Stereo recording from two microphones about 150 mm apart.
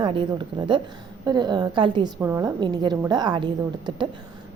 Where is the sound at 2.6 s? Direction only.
30° right (ahead or behind).